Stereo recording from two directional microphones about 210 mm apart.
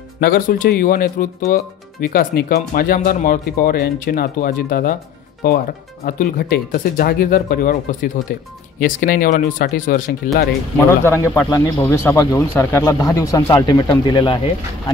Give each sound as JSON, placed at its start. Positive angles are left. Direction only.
{"t": 0.2, "sound": "speech", "side_deg": 45}
{"t": 11.1, "sound": "speech", "side_deg": 10}